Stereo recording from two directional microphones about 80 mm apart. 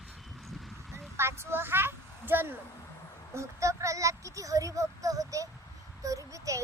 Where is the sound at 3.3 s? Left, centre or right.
Right.